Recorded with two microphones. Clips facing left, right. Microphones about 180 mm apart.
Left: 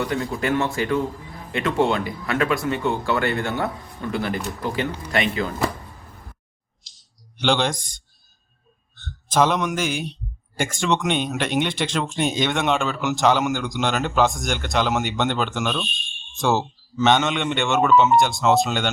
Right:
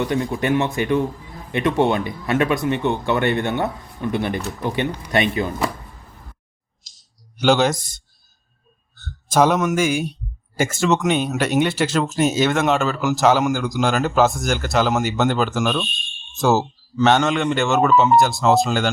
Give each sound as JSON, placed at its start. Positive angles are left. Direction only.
{"t": 0.0, "sound": "speech", "side_deg": -20}
{"t": 7.3, "sound": "speech", "side_deg": -5}
{"t": 17.0, "sound": "speech", "side_deg": 0}